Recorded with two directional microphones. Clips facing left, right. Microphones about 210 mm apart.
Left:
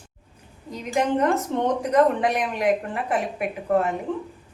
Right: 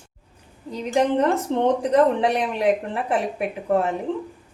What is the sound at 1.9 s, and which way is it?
Speech, 30° right (ahead or behind).